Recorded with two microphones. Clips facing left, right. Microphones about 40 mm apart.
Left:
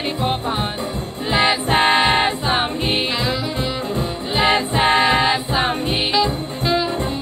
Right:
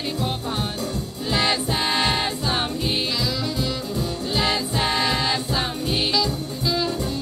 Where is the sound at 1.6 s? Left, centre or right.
Left.